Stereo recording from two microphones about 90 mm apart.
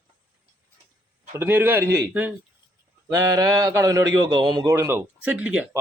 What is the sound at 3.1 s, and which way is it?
Mantra, 40° right (ahead or behind).